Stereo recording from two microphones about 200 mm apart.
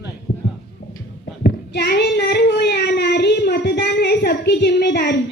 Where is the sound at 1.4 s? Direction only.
50° left (ahead or behind).